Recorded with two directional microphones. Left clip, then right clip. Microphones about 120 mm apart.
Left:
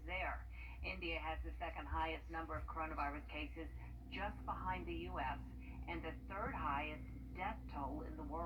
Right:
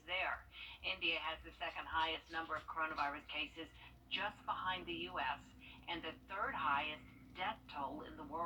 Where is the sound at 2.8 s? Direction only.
20° right (ahead or behind).